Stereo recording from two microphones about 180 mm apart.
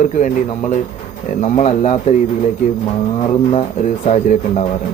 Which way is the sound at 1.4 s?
40° left (ahead or behind).